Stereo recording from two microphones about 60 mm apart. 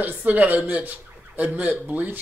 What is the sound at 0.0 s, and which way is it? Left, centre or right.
Speech, right.